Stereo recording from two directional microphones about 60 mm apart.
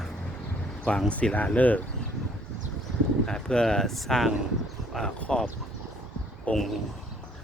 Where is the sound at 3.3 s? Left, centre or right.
Centre.